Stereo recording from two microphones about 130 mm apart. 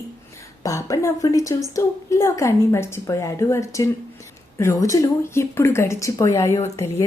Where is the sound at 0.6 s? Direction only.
25° left (ahead or behind).